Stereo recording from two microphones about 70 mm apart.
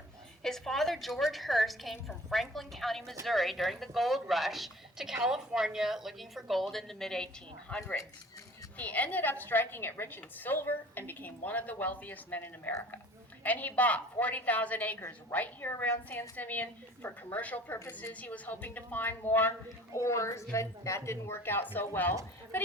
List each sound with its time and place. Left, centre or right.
0.4 s speech: centre
7.7 s a woman's voice: centre
19.9 s a woman's voice: left